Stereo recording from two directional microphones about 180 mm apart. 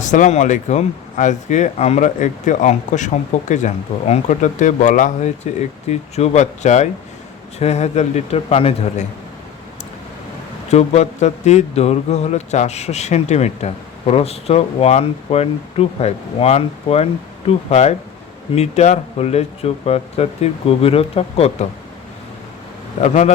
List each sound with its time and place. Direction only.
0.0 s speech: 45° left (ahead or behind)
10.7 s speech: 35° left (ahead or behind)
23.0 s speech: 40° left (ahead or behind)